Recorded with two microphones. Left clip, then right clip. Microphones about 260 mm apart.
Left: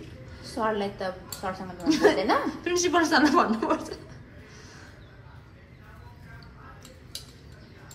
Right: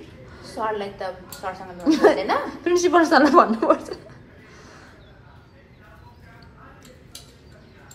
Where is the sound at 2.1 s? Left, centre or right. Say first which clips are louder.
Right 2 dB; left.